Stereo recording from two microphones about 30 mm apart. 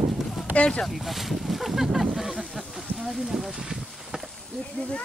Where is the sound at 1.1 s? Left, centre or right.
Centre.